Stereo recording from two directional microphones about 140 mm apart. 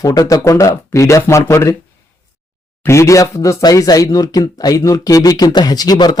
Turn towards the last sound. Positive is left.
turn(degrees=30)  # may be behind; listen again after turning